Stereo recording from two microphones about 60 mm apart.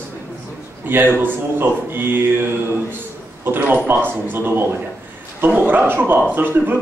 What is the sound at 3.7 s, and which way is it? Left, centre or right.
A man's voice, right.